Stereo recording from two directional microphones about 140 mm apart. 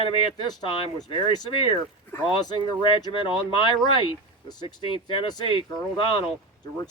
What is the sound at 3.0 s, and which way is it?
Speech, 35° left (ahead or behind).